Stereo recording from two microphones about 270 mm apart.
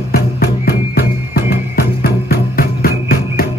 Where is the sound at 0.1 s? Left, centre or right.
Left.